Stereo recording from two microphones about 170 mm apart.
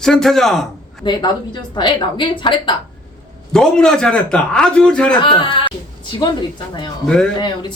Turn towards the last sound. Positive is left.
turn(degrees=25)  # may be behind; listen again after turning